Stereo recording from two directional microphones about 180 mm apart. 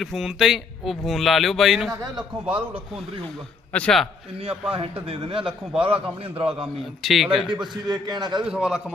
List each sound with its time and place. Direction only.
0.0 s speech: centre (ahead or behind)
2.5 s speech: 30° right (ahead or behind)
3.7 s a man's voice: 5° left (ahead or behind)
4.7 s speech: 30° right (ahead or behind)
7.0 s speech: centre (ahead or behind)
7.4 s a man's voice: 25° right (ahead or behind)
8.4 s speech: 5° right (ahead or behind)